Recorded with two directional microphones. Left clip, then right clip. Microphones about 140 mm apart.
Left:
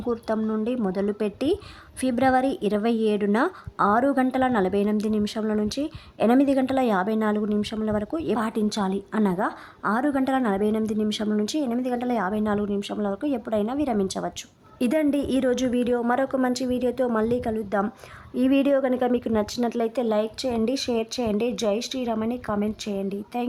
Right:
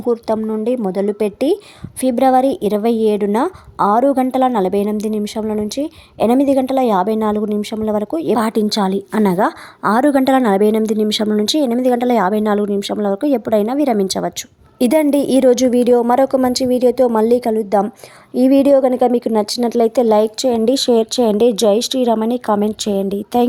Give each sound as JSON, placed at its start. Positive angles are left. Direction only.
{"t": 0.0, "sound": "a woman's voice", "side_deg": -25}
{"t": 8.4, "sound": "a woman's voice", "side_deg": -40}